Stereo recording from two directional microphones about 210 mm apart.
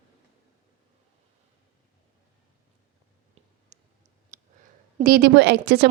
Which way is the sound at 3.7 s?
35° right (ahead or behind).